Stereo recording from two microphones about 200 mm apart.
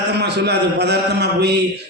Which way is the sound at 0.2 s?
55° right (ahead or behind).